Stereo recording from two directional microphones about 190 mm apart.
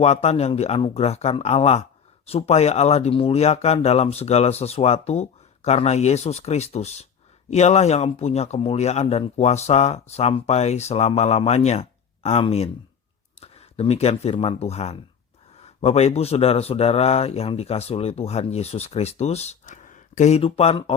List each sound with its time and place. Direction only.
0.0 s speech: 35° left (ahead or behind)